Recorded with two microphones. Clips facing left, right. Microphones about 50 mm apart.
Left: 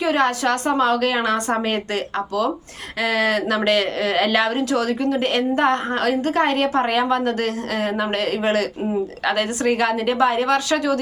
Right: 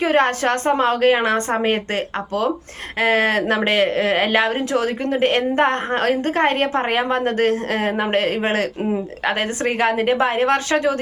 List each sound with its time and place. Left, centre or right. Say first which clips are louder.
0.0 s speech: right 2 dB; right